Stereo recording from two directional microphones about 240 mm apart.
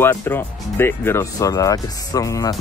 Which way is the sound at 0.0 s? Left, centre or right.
Centre.